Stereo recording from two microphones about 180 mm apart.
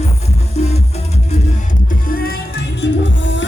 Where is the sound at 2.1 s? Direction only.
55° left (ahead or behind); by 3.5 s 90° left.